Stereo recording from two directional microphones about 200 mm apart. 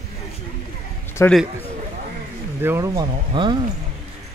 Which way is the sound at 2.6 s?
15° right (ahead or behind).